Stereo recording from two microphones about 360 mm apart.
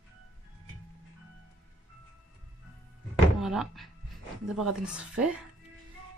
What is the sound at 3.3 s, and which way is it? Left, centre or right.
Speech, centre.